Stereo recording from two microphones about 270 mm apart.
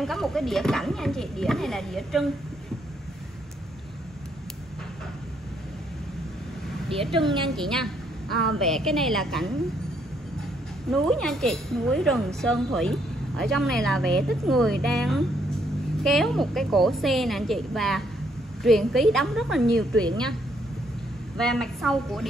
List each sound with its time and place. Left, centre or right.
0.0 s speech: centre
7.0 s a woman's voice: centre
7.2 s speech: centre
10.9 s speech: centre
21.4 s speech: centre